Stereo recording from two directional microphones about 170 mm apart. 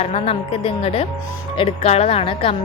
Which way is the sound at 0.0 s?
35° left (ahead or behind).